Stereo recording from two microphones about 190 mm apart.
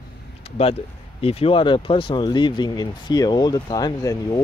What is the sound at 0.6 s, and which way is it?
Speech, 30° left (ahead or behind).